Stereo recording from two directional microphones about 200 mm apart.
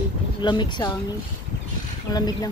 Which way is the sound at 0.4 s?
20° left (ahead or behind).